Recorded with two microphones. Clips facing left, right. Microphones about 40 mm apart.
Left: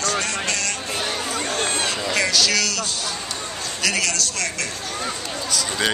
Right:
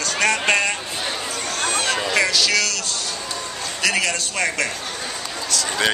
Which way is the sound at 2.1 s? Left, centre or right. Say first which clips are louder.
Right 1 dB; centre.